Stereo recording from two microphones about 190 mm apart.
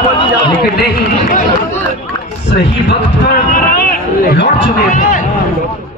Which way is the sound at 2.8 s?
50° left (ahead or behind).